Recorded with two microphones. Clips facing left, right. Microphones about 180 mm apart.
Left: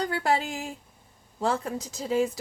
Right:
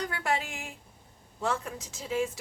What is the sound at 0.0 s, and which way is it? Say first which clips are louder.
A woman's voice: left 5 dB; 35° left (ahead or behind).